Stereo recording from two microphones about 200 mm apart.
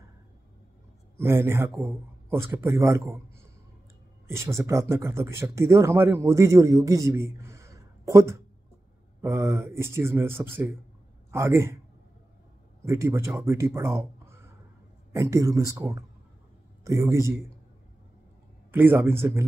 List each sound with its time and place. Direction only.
1.1 s speech: 15° right (ahead or behind)
4.3 s speech: 15° right (ahead or behind)
12.8 s speech: 15° right (ahead or behind)
18.7 s speech: 10° right (ahead or behind)